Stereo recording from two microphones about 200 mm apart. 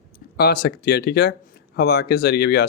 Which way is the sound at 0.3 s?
50° left (ahead or behind).